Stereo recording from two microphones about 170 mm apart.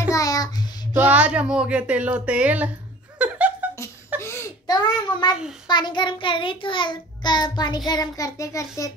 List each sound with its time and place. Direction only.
0.1 s child singing: 20° left (ahead or behind)
0.9 s speech: 10° right (ahead or behind)
3.2 s laughter: 10° right (ahead or behind)
4.2 s a sound: 15° left (ahead or behind)
5.7 s child singing: 25° left (ahead or behind)